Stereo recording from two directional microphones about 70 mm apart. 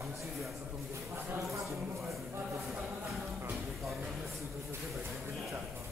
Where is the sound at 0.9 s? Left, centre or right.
Right.